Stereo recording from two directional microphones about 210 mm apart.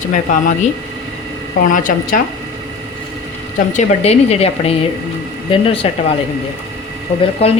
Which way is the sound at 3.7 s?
30° left (ahead or behind).